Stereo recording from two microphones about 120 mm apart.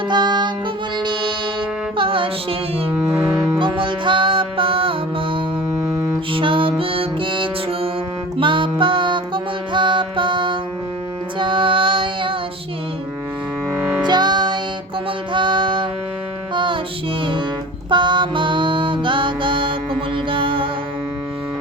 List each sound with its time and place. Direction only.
0.1 s music: 40° right (ahead or behind)
2.0 s music: 45° right (ahead or behind)
14.0 s music: 35° right (ahead or behind)
17.8 s music: 40° right (ahead or behind)